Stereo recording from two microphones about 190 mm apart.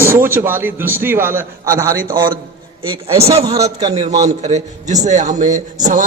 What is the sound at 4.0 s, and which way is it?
Speech, 20° right (ahead or behind).